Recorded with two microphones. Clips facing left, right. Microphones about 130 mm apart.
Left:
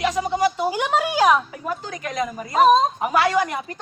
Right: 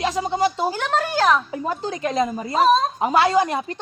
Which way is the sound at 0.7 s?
10° left (ahead or behind).